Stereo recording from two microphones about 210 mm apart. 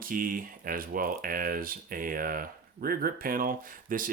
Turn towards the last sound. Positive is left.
turn(degrees=-40)  # may be behind; listen again after turning